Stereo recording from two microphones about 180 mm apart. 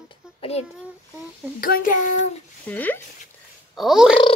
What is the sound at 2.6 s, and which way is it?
Speech, 10° left (ahead or behind).